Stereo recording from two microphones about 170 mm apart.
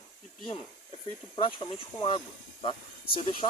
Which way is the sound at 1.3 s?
30° left (ahead or behind).